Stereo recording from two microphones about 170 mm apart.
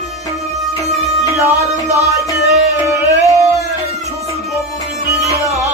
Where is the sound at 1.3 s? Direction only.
15° right (ahead or behind).